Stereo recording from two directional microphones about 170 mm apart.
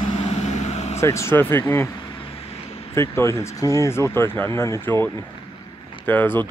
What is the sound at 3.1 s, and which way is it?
Speech, 15° left (ahead or behind).